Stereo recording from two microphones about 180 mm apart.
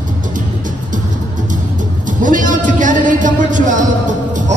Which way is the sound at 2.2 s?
45° right (ahead or behind).